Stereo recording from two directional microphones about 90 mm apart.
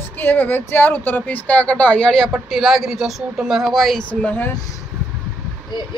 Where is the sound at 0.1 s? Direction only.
20° left (ahead or behind); by 4.0 s centre (ahead or behind).